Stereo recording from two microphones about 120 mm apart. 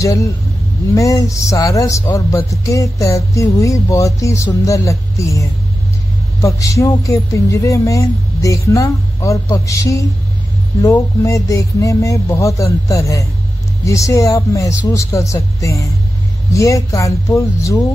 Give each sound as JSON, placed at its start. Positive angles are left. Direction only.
{"t": 0.0, "sound": "speech", "side_deg": 25}